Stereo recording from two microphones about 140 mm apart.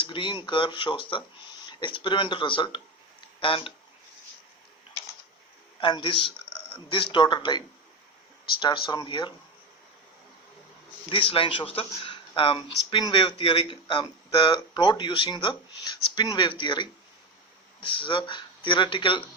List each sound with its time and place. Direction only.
0.0 s speech: 35° left (ahead or behind)
5.8 s speech: 35° left (ahead or behind)
8.6 s speech: 35° left (ahead or behind)
11.1 s speech: 40° left (ahead or behind)